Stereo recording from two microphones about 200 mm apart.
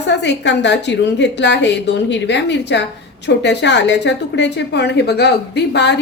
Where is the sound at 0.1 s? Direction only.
60° left (ahead or behind).